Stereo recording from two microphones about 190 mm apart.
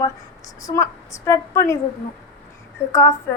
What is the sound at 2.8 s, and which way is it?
Speech, 15° left (ahead or behind).